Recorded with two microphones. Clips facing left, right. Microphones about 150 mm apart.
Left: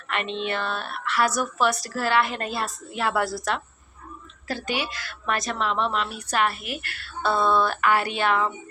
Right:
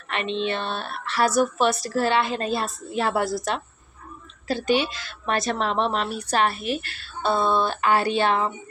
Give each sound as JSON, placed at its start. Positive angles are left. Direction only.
{"t": 0.1, "sound": "a woman's voice", "side_deg": -20}